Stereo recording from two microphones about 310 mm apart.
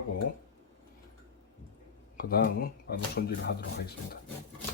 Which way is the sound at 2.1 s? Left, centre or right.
Left.